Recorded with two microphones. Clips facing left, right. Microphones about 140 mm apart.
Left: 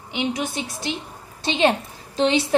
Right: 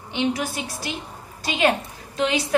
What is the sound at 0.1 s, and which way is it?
A woman's voice, 15° left (ahead or behind).